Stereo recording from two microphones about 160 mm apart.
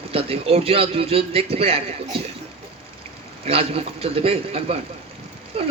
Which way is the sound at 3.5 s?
35° right (ahead or behind).